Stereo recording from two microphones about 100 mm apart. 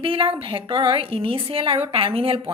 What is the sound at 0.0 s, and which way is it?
Speech, 65° right (ahead or behind).